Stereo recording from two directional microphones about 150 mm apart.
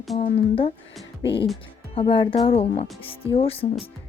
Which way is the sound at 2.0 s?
35° left (ahead or behind).